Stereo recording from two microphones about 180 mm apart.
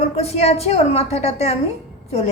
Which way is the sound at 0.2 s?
35° left (ahead or behind).